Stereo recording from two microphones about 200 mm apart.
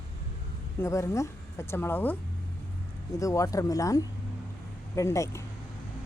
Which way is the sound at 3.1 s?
15° left (ahead or behind).